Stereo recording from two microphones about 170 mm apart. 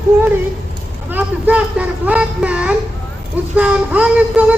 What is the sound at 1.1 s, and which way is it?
A child's voice, 10° right (ahead or behind).